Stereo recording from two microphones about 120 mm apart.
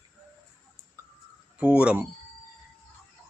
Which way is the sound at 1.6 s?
10° right (ahead or behind).